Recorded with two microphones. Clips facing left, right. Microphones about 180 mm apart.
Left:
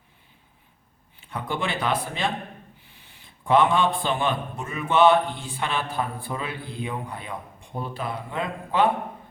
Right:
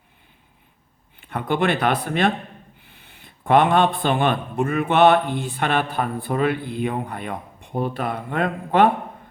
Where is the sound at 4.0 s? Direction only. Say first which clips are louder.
Right 5 dB; 60° right (ahead or behind).